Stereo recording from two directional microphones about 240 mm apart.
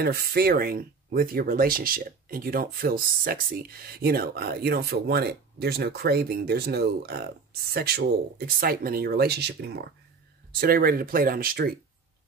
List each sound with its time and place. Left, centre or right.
0.0 s speech: right